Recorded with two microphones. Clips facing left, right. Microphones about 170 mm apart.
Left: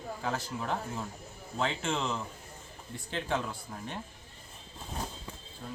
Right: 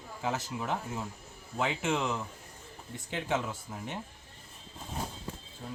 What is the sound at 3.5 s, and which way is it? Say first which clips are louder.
Speech: right 1 dB; 5° right (ahead or behind).